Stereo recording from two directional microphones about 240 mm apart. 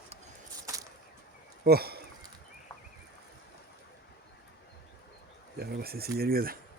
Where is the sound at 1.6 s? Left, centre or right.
Right.